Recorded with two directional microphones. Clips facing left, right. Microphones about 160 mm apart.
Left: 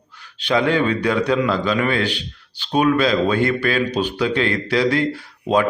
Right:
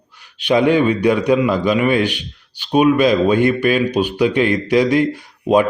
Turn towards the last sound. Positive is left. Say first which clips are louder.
# right 4 dB
turn(degrees=-15)  # may be behind; listen again after turning